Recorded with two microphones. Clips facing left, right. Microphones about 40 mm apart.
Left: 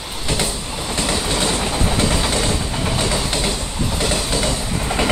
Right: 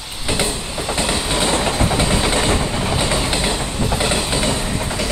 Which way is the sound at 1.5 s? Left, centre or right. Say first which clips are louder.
Right 3 dB; right.